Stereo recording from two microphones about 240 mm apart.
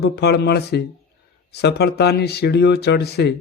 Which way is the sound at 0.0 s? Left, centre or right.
Left.